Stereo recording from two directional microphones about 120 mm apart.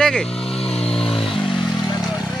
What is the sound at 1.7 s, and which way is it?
Vehicle, 35° left (ahead or behind).